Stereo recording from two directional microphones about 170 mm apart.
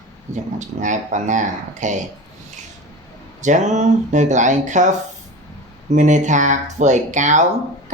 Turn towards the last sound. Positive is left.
turn(degrees=-45)  # may be behind; listen again after turning